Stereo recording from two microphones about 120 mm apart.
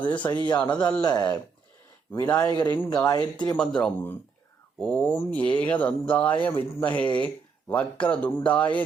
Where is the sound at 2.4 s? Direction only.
30° left (ahead or behind).